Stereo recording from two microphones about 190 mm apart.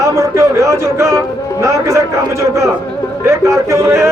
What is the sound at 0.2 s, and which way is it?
A man's voice, 15° right (ahead or behind).